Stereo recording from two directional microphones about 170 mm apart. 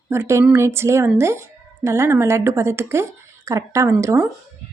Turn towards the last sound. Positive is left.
turn(degrees=-15)  # may be behind; listen again after turning